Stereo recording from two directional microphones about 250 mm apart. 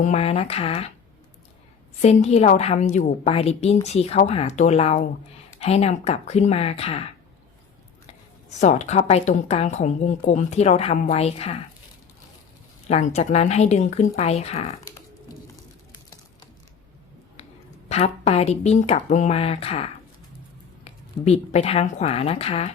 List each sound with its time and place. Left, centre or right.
0.0 s a woman's voice: left
2.0 s a woman's voice: left
8.4 s a woman's voice: left
12.9 s a woman's voice: left
17.8 s a woman's voice: left
21.2 s a woman's voice: left